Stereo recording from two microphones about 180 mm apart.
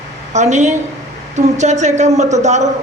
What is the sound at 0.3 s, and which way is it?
A woman's voice, 40° right (ahead or behind).